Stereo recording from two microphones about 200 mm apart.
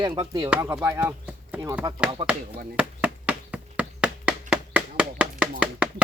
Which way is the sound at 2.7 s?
5° right (ahead or behind).